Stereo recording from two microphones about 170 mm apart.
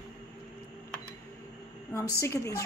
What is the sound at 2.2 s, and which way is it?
Speech, 15° left (ahead or behind).